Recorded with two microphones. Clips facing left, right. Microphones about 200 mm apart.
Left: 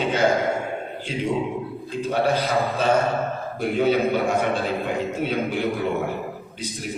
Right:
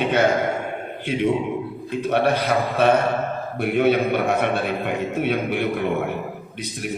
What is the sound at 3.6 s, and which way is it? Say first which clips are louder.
A man's voice: right 2 dB; 65° right (ahead or behind).